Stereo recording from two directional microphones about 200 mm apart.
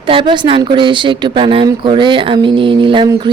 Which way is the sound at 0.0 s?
25° right (ahead or behind).